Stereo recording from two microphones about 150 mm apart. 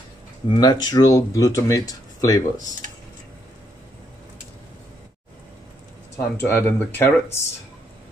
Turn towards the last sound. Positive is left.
turn(degrees=15)  # may be behind; listen again after turning